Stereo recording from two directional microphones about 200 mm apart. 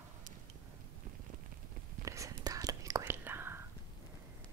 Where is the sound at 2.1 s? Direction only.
15° right (ahead or behind).